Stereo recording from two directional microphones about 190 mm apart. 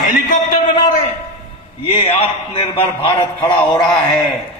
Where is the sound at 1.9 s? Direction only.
30° left (ahead or behind).